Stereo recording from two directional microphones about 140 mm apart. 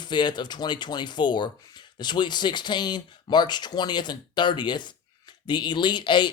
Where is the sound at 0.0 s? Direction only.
35° left (ahead or behind).